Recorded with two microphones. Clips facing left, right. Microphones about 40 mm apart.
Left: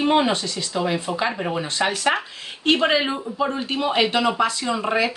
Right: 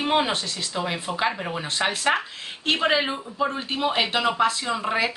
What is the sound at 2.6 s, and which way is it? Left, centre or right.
Speech, centre.